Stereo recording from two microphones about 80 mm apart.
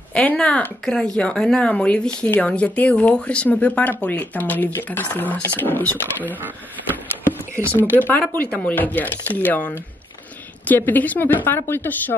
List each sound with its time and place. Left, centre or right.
0.1 s speech: centre
6.9 s a sound: right
7.9 s speech: left
10.8 s speech: left